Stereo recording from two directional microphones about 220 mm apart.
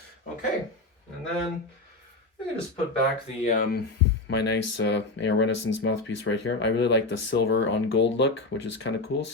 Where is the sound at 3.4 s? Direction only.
35° left (ahead or behind).